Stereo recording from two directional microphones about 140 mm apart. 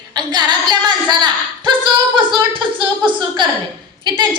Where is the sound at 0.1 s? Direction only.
30° right (ahead or behind).